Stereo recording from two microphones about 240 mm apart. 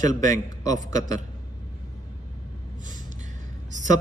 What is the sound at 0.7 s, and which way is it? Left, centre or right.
Speech, right.